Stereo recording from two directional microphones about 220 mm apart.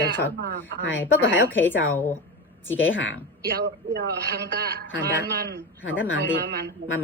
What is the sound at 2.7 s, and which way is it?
Speech, 60° left (ahead or behind).